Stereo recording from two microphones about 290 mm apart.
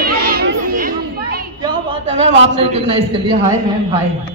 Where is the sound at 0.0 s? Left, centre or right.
Right.